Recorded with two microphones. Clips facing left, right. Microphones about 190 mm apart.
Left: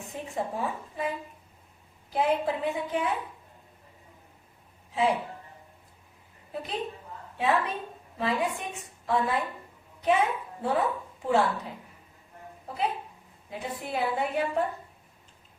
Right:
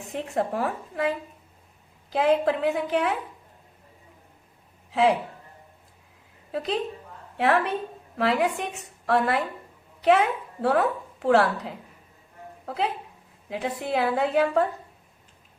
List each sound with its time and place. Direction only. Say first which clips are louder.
0.1 s a woman's voice: right 6 dB; 75° right (ahead or behind)
4.9 s speech: right 5 dB; 90° right
6.5 s a woman's voice: right 8 dB; 90° right
7.3 s a woman's voice: right 4 dB; 70° right (ahead or behind); by 14.7 s 90° right